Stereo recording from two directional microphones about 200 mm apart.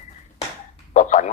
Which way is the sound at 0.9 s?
40° left (ahead or behind).